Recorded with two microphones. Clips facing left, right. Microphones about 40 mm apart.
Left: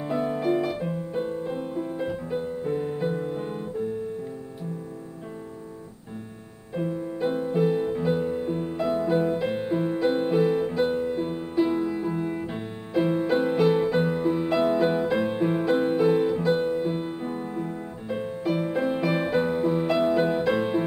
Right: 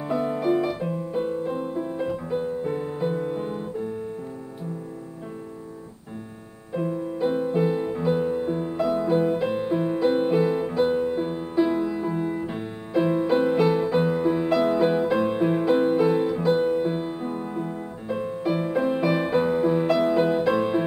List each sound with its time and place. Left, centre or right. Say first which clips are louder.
0.1 s music: right 2 dB; centre
6.7 s music: right 2 dB; centre
11.0 s music: right 2 dB; centre
18.4 s music: even; centre
18.7 s music: right 2 dB; centre